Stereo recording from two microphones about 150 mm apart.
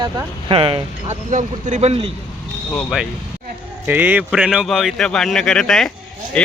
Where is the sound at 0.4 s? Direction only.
35° right (ahead or behind).